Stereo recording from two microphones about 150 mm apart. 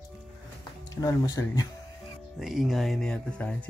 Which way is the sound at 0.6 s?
25° left (ahead or behind).